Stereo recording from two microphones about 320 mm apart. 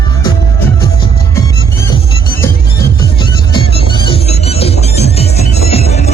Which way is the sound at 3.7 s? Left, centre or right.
Centre.